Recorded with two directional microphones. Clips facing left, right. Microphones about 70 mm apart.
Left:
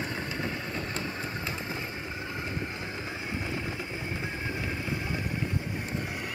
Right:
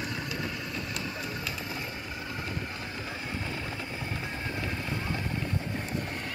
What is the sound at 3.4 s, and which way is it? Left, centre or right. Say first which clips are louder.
Vehicle: left 2 dB; centre.